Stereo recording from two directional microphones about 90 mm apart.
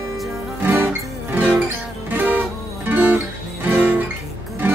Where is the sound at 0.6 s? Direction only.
25° right (ahead or behind).